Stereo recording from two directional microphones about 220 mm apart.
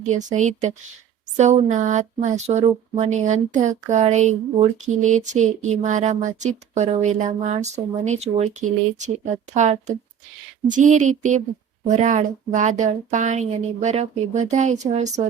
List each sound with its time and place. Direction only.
0.0 s speech: 35° right (ahead or behind)